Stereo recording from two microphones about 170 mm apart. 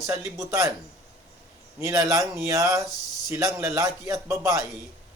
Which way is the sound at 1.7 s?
15° right (ahead or behind).